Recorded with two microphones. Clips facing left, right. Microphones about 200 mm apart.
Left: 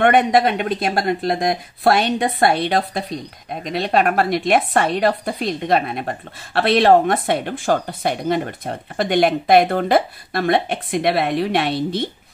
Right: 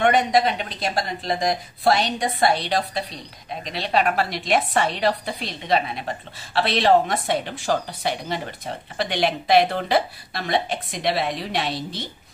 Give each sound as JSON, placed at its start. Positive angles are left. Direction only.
{"t": 0.0, "sound": "a woman's voice", "side_deg": 55}